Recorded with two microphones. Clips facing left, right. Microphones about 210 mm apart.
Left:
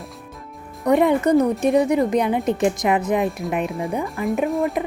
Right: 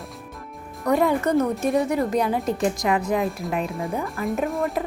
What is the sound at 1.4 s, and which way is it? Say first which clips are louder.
Speech: left 4 dB; centre (ahead or behind).